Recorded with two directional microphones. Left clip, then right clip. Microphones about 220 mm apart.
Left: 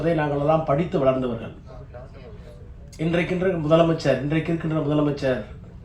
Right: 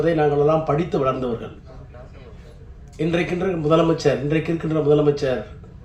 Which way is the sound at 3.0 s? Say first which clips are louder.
Right 1 dB; 55° right (ahead or behind).